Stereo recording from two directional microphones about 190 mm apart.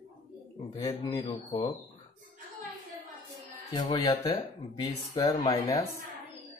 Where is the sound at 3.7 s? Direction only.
25° left (ahead or behind).